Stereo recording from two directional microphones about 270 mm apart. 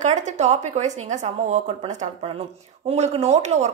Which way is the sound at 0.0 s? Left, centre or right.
Right.